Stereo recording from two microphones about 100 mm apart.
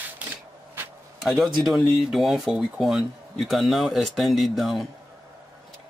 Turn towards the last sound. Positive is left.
turn(degrees=0)  # may be behind; listen again after turning